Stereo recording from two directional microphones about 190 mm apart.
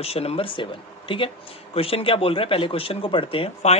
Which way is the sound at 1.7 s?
30° left (ahead or behind).